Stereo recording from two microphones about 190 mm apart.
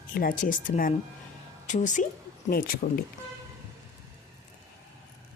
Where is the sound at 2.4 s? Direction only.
50° left (ahead or behind).